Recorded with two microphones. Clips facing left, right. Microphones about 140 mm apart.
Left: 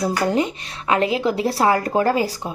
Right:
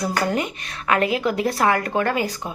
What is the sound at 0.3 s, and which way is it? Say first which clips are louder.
Speech: left 4 dB; 25° left (ahead or behind).